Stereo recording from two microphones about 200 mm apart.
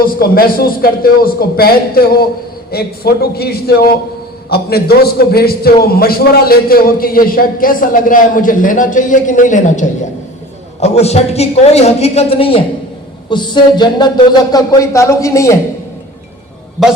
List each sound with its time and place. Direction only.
0.0 s a man's voice: 50° left (ahead or behind); by 12.6 s 25° left (ahead or behind)
13.3 s music: 20° left (ahead or behind)
14.5 s speech: 15° left (ahead or behind)
16.8 s a man's voice: centre (ahead or behind)